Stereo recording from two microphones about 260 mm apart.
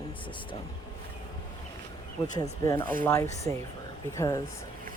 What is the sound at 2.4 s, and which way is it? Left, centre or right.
Speech, centre.